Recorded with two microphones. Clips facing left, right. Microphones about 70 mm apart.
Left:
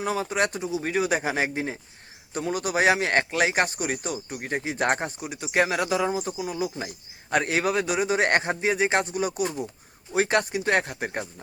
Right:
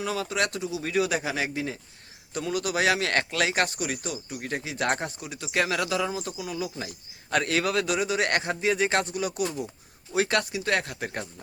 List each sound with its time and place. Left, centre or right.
0.0 s a man's voice: left